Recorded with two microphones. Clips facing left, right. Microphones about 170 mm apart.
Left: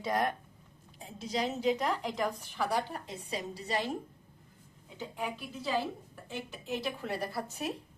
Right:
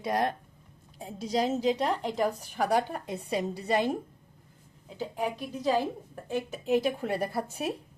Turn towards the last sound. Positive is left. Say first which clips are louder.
# right 5 dB
turn(degrees=-50)  # may be behind; listen again after turning